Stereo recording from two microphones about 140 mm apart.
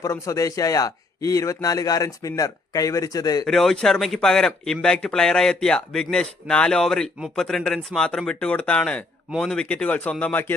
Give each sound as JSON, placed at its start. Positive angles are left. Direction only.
{"t": 0.0, "sound": "a man's voice", "side_deg": 25}
{"t": 3.4, "sound": "speech", "side_deg": 0}